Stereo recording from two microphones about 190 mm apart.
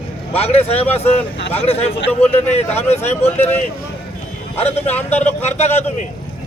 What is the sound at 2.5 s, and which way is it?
Speech, 35° left (ahead or behind).